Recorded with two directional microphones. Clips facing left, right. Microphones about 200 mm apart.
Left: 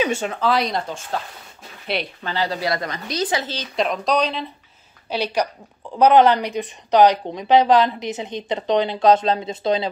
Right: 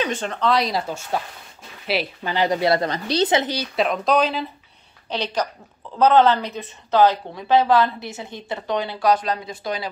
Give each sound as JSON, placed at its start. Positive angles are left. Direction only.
{"t": 0.0, "sound": "speech", "side_deg": 10}
{"t": 2.2, "sound": "speech", "side_deg": -20}
{"t": 3.5, "sound": "speech", "side_deg": 0}
{"t": 5.1, "sound": "a woman's voice", "side_deg": 10}